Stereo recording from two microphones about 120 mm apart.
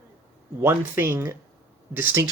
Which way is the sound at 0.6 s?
20° right (ahead or behind).